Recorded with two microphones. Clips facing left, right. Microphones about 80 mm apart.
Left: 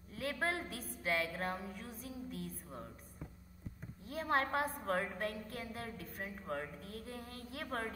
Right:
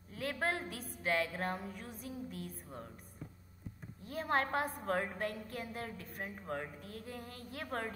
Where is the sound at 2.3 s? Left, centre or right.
Right.